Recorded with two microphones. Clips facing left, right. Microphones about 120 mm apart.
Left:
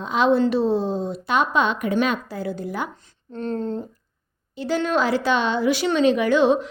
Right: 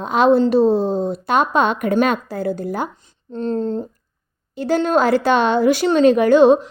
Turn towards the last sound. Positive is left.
turn(degrees=-45)  # may be behind; listen again after turning